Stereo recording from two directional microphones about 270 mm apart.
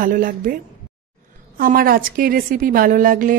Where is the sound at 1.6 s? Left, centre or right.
Right.